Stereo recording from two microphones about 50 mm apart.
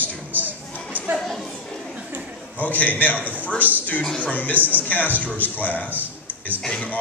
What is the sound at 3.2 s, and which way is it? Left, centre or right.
Speech, right.